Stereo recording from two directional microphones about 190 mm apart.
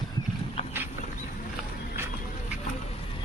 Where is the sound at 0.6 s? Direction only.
30° left (ahead or behind).